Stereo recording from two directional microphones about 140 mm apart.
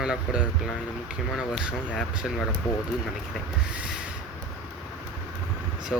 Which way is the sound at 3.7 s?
10° right (ahead or behind).